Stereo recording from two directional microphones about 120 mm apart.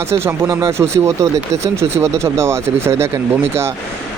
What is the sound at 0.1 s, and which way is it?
Speech, 20° right (ahead or behind).